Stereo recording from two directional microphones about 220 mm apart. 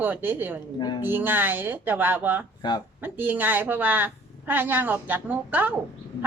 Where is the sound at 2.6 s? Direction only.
20° left (ahead or behind).